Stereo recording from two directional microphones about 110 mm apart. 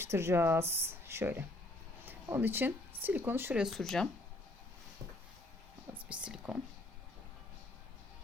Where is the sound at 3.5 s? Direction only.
5° right (ahead or behind).